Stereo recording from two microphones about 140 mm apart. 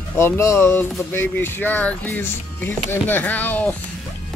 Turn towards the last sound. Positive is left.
turn(degrees=10)  # may be behind; listen again after turning